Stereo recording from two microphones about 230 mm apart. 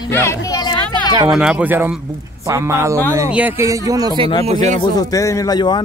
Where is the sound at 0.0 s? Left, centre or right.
Centre.